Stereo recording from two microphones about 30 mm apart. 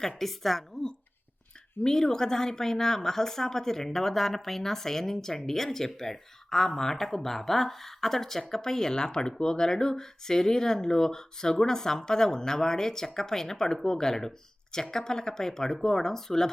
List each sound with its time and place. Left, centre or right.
0.2 s speech: centre
1.8 s speech: centre